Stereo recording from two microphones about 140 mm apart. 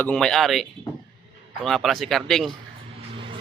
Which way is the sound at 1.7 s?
Centre (ahead or behind).